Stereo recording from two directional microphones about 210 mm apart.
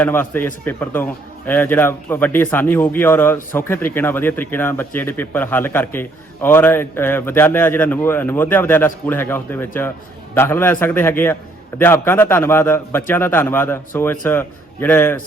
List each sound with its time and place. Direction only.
0.0 s a man's voice: 10° left (ahead or behind)